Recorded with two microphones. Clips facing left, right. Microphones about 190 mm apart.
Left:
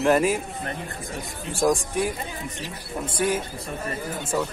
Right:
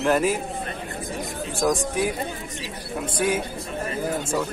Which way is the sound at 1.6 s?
5° left (ahead or behind).